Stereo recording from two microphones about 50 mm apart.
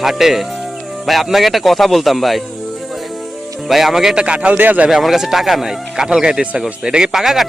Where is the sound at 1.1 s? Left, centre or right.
Centre.